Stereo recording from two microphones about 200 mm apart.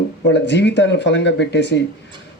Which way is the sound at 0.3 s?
60° left (ahead or behind).